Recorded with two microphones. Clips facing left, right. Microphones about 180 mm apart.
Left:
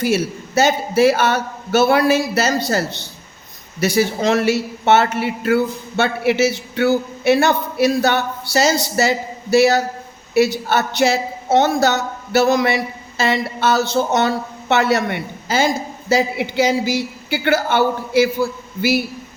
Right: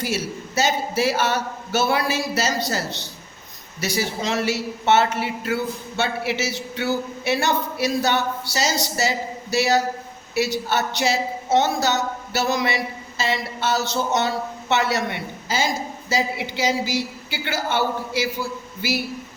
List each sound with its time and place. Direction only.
0.0 s a woman's voice: 55° left (ahead or behind)